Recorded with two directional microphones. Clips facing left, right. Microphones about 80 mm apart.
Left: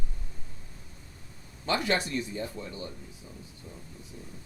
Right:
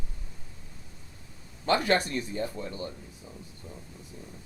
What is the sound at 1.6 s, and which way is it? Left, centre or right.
Speech, right.